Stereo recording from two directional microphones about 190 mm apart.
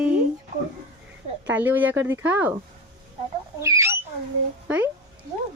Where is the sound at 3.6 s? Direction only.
15° right (ahead or behind).